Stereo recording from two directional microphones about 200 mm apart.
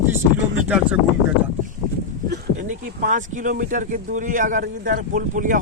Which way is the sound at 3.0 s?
40° right (ahead or behind).